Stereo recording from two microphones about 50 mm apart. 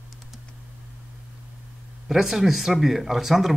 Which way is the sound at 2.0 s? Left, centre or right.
Centre.